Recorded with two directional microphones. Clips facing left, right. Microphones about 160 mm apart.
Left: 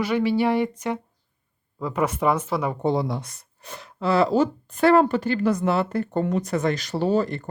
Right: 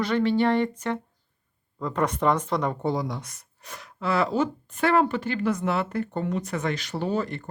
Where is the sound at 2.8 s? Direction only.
25° left (ahead or behind).